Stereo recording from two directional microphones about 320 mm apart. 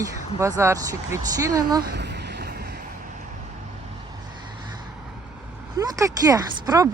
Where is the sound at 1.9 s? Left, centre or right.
Right.